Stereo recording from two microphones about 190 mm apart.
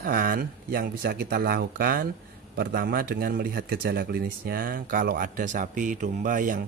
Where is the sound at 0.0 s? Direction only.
50° right (ahead or behind).